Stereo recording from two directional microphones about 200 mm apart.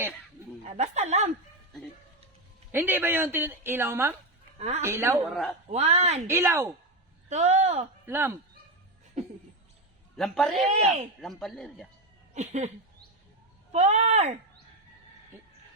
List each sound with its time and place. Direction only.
0.6 s speech: 35° right (ahead or behind)
2.7 s a woman's voice: 10° right (ahead or behind)
4.5 s speech: 30° right (ahead or behind)
4.8 s a woman's voice: 15° right (ahead or behind)
5.7 s speech: 35° right (ahead or behind)
6.2 s a woman's voice: 15° right (ahead or behind)
7.3 s speech: 35° right (ahead or behind)
8.0 s a woman's voice: 10° right (ahead or behind)
10.2 s speech: centre (ahead or behind)
12.3 s speech: 35° right (ahead or behind)
13.7 s speech: 35° right (ahead or behind)